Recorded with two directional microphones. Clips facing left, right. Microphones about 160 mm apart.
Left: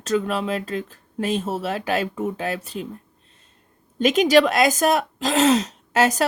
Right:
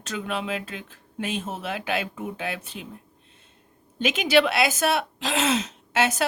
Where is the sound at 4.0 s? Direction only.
40° left (ahead or behind).